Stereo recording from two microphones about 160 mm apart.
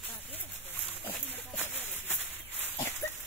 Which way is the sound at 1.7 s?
10° right (ahead or behind).